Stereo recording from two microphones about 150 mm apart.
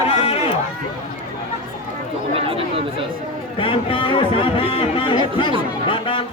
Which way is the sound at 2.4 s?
40° right (ahead or behind).